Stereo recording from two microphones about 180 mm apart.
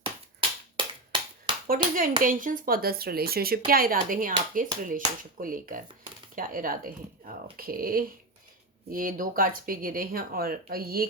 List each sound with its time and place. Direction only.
0.3 s finger snapping: 25° right (ahead or behind)
1.6 s speech: 55° right (ahead or behind)